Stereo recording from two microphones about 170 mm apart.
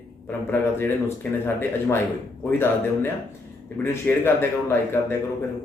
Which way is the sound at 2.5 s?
10° left (ahead or behind).